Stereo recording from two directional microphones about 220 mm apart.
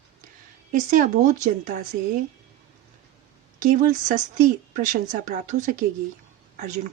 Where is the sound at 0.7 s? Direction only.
35° right (ahead or behind).